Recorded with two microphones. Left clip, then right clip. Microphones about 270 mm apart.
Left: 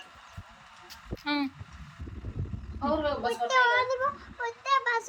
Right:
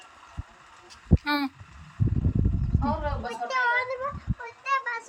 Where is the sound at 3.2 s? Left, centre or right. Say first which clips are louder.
Left 4 dB; left.